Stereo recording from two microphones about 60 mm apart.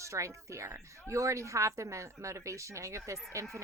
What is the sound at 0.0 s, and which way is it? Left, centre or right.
Speech, right.